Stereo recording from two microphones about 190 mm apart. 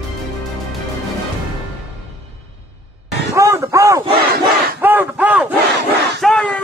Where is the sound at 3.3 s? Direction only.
15° right (ahead or behind).